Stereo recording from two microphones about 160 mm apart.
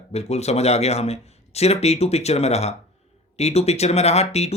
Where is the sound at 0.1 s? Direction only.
40° left (ahead or behind).